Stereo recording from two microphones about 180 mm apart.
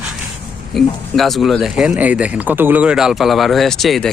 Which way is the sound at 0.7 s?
Centre (ahead or behind).